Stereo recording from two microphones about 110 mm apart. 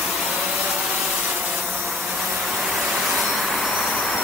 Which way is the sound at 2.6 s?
Centre (ahead or behind).